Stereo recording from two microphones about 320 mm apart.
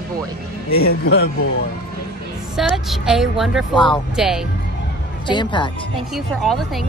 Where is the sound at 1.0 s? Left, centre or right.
Left.